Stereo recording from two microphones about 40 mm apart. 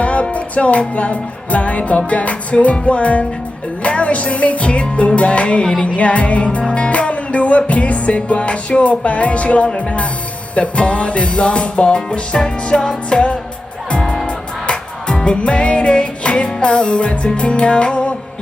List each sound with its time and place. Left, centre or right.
0.0 s music: left
14.7 s music: left